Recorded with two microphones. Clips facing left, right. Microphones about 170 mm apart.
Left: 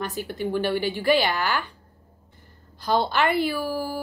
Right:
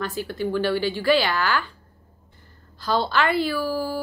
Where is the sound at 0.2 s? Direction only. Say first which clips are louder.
Right 2 dB; 15° left (ahead or behind).